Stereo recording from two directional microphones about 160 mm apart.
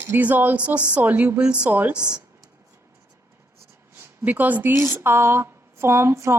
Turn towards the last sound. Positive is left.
turn(degrees=-15)  # may be behind; listen again after turning